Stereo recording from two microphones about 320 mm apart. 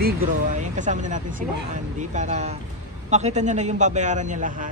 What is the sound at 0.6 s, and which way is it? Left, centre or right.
Speech, right.